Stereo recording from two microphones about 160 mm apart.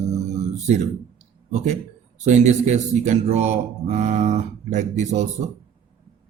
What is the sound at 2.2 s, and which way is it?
Speech, 45° right (ahead or behind).